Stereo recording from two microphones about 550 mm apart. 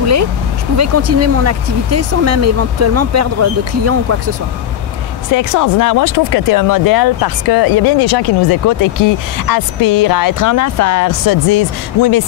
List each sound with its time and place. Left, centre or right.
0.0 s speech: right
5.3 s speech: left